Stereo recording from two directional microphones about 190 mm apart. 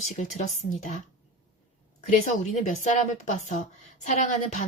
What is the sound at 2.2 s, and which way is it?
Speech, 35° left (ahead or behind).